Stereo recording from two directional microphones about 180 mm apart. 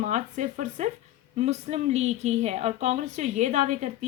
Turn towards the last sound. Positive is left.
turn(degrees=-40)  # may be behind; listen again after turning